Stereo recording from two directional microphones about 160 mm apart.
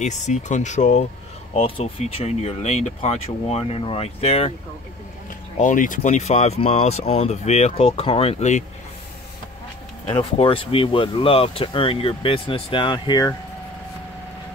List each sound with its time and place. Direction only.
0.0 s speech: 50° left (ahead or behind)
1.5 s speech: 35° left (ahead or behind)
5.6 s speech: 55° left (ahead or behind)
10.0 s speech: 35° left (ahead or behind)